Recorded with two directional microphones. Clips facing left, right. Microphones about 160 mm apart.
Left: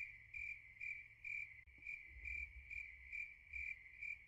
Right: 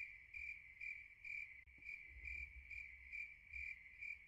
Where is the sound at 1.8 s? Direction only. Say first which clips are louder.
Left 2 dB; 20° left (ahead or behind).